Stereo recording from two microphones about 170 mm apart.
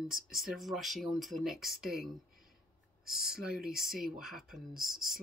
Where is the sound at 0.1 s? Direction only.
Centre (ahead or behind).